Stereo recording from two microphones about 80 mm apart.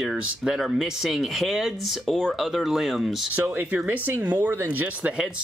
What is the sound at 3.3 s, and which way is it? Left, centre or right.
Speech, right.